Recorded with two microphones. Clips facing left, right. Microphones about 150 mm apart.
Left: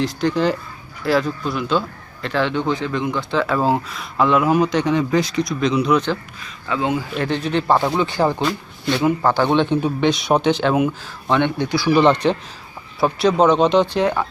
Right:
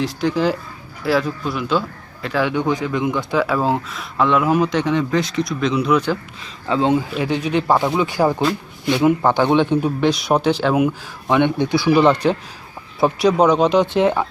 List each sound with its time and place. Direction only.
0.0 s speech: 5° right (ahead or behind)
3.4 s speech: centre (ahead or behind)
6.7 s speech: 30° right (ahead or behind)
7.1 s speech: 10° right (ahead or behind)
8.9 s speech: 15° right (ahead or behind)
11.9 s speech: 5° right (ahead or behind)
13.8 s speech: 20° right (ahead or behind)